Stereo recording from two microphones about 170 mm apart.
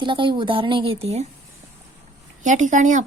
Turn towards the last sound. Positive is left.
turn(degrees=-50)  # may be behind; listen again after turning